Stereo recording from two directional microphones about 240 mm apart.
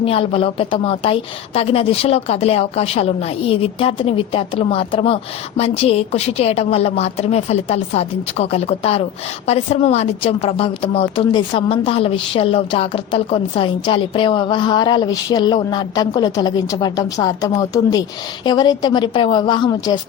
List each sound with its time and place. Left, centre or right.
0.0 s a woman's voice: left